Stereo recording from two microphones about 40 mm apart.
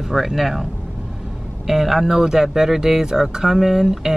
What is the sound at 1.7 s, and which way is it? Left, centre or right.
Speech, centre.